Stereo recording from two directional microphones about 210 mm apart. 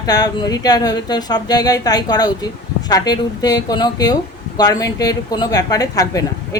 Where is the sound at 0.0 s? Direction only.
20° left (ahead or behind).